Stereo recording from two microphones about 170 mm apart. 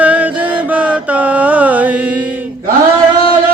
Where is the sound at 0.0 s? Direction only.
10° right (ahead or behind).